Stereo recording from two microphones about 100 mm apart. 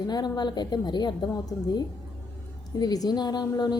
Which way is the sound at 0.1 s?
45° left (ahead or behind).